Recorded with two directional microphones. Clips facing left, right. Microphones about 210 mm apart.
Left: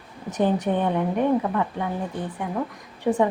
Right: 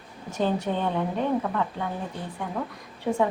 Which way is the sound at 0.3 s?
20° left (ahead or behind).